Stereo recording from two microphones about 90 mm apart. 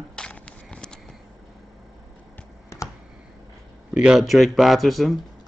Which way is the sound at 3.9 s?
5° right (ahead or behind).